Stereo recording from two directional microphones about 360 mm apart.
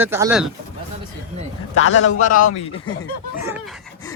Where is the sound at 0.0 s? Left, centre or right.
Centre.